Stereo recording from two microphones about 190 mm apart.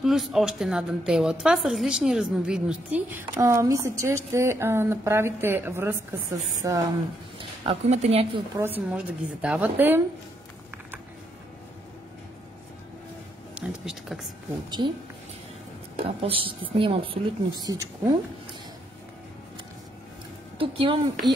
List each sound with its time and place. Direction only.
0.0 s a woman's voice: centre (ahead or behind)
7.3 s speech: 30° right (ahead or behind)
8.5 s a woman's voice: 10° right (ahead or behind)
13.6 s a woman's voice: 5° right (ahead or behind)
16.0 s a woman's voice: 30° right (ahead or behind)
20.5 s a woman's voice: 25° right (ahead or behind)